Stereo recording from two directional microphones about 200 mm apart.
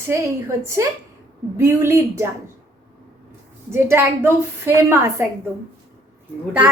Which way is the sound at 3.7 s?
10° right (ahead or behind).